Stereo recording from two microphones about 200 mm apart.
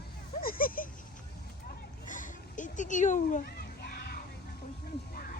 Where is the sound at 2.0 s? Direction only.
40° left (ahead or behind).